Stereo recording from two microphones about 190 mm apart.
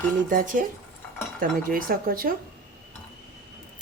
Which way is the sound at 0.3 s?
45° right (ahead or behind).